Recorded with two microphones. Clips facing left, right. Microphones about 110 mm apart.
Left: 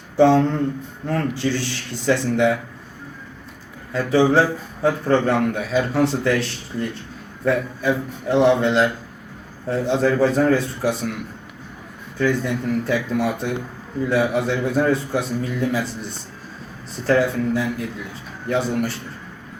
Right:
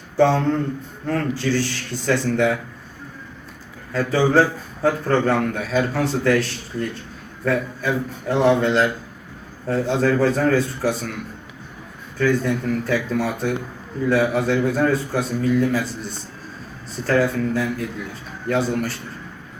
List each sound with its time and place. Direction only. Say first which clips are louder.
0.2 s a man's voice: left 2 dB; 20° left (ahead or behind)
3.9 s a man's voice: left 1 dB; 20° left (ahead or behind)
12.2 s a man's voice: right 1 dB; 20° left (ahead or behind)
17.1 s a man's voice: left 1 dB; 20° left (ahead or behind)